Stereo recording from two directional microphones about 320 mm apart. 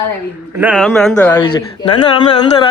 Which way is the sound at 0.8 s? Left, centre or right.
Centre.